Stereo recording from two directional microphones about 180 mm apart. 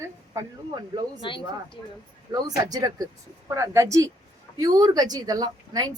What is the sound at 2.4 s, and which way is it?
A woman's voice, 20° right (ahead or behind).